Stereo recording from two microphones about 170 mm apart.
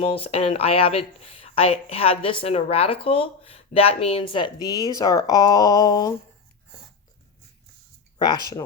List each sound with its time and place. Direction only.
0.0 s speech: 35° left (ahead or behind)